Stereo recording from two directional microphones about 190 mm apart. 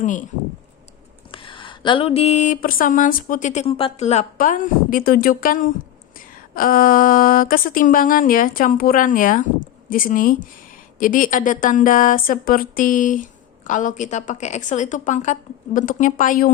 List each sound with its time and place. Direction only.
0.0 s a woman's voice: 40° left (ahead or behind)
1.3 s a woman's voice: 25° left (ahead or behind); by 16.5 s 45° left (ahead or behind)